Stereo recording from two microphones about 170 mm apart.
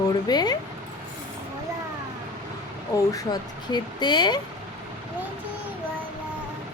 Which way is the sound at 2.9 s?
20° left (ahead or behind).